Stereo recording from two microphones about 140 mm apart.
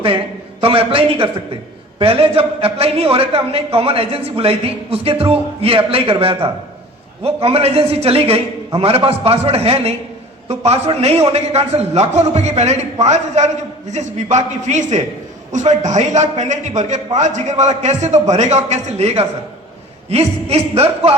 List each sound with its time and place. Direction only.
0.6 s a man's voice: 40° right (ahead or behind)